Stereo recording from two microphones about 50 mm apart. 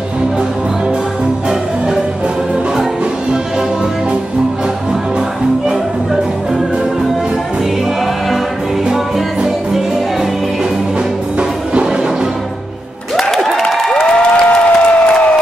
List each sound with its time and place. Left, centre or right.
8.9 s music: centre
11.3 s music: right
13.1 s a sound: centre
13.7 s applause: centre